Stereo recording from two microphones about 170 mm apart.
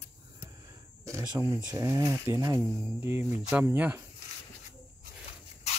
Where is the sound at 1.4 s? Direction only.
20° right (ahead or behind).